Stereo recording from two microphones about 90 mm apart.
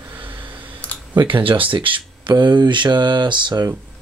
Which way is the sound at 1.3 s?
75° right (ahead or behind).